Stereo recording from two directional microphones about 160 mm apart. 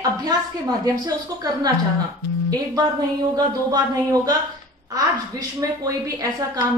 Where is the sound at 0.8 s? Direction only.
25° right (ahead or behind).